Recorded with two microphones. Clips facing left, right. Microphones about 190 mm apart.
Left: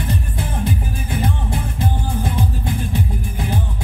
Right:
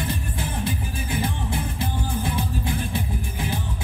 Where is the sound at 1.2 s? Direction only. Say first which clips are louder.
Left 4 dB; 40° left (ahead or behind).